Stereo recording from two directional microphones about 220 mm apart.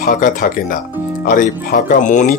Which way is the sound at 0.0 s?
40° left (ahead or behind).